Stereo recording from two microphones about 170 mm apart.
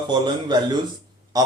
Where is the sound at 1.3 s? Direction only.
20° right (ahead or behind).